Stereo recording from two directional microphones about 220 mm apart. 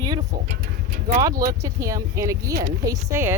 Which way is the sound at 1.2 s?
15° right (ahead or behind).